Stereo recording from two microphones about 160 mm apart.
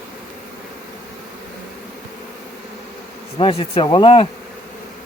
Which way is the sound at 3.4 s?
35° left (ahead or behind).